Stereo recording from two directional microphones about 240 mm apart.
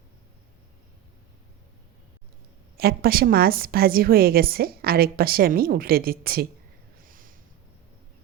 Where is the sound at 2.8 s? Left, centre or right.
Right.